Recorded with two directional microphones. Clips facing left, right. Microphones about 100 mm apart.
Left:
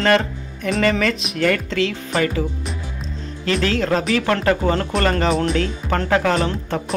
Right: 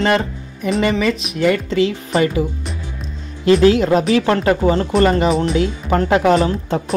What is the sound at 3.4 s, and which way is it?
Speech, 20° right (ahead or behind).